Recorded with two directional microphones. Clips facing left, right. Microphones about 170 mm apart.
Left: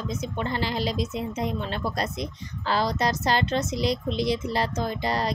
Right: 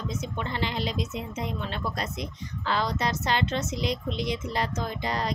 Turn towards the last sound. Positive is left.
turn(degrees=35)  # may be behind; listen again after turning